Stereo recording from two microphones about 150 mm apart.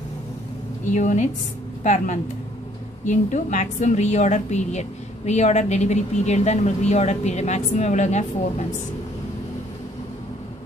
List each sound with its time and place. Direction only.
0.8 s a woman's voice: 55° left (ahead or behind)